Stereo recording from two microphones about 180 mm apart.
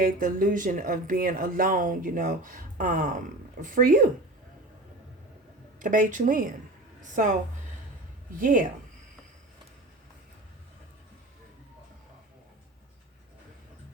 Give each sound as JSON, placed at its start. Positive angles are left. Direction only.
{"t": 0.0, "sound": "speech", "side_deg": -50}
{"t": 5.8, "sound": "speech", "side_deg": -45}
{"t": 8.4, "sound": "speech", "side_deg": -50}